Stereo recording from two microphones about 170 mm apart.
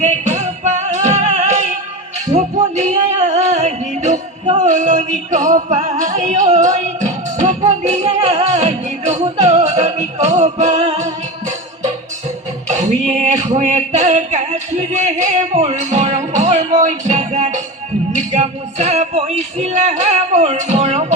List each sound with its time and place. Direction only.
0.0 s music: 45° right (ahead or behind)
12.6 s a sound: 45° right (ahead or behind)
18.3 s music: 40° right (ahead or behind)